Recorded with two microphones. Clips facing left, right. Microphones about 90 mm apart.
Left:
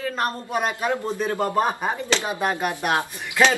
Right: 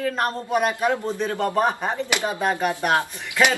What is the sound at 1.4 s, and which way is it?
Speech, 15° left (ahead or behind).